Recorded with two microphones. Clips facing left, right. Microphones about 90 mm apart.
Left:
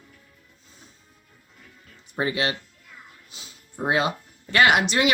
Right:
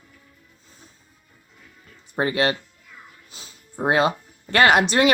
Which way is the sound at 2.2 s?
40° right (ahead or behind).